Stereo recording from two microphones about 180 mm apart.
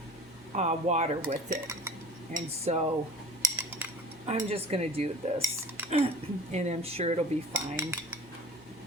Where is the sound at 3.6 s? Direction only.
10° right (ahead or behind).